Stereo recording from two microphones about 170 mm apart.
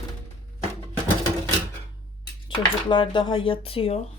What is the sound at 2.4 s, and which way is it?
Speech, 30° left (ahead or behind).